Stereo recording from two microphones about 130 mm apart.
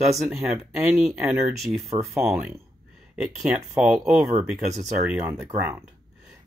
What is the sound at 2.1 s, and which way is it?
Speech, 20° right (ahead or behind).